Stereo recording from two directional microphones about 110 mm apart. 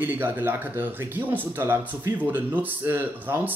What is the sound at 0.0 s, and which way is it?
Speech, 20° right (ahead or behind).